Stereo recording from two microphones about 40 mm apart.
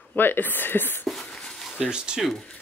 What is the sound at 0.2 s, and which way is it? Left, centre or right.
Speech, left.